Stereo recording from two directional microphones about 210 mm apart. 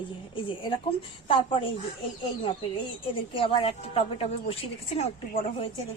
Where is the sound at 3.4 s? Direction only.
25° left (ahead or behind).